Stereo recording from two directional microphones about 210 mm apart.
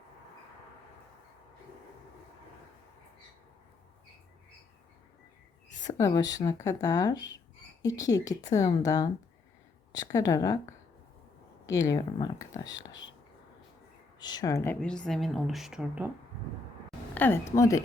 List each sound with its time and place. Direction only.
6.0 s a woman's voice: 20° left (ahead or behind)
11.6 s a woman's voice: 15° left (ahead or behind)
12.7 s speech: 60° left (ahead or behind)
14.2 s a woman's voice: 20° left (ahead or behind); by 16.0 s 5° right (ahead or behind)
17.2 s a woman's voice: 10° left (ahead or behind)